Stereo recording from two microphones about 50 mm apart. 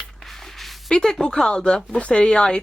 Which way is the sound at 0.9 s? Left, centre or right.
Centre.